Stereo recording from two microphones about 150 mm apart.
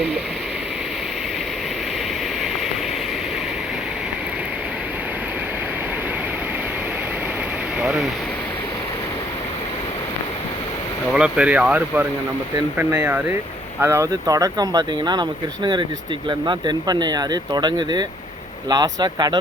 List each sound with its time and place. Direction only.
7.8 s a sound: 5° right (ahead or behind)
11.1 s speech: 5° right (ahead or behind)
13.8 s speech: 20° right (ahead or behind)